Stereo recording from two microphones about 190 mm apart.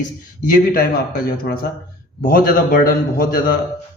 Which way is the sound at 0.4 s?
50° left (ahead or behind).